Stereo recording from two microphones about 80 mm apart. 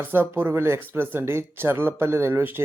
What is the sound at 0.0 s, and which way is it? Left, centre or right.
Speech, right.